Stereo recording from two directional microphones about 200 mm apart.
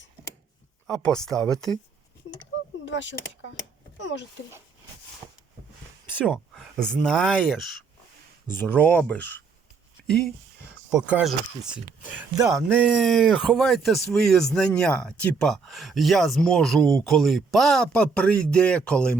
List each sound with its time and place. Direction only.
0.9 s speech: 5° left (ahead or behind)
2.3 s a sound: 90° left
2.8 s speech: 65° left (ahead or behind)
6.2 s speech: centre (ahead or behind)
10.0 s a sound: centre (ahead or behind)
10.9 s speech: 5° right (ahead or behind)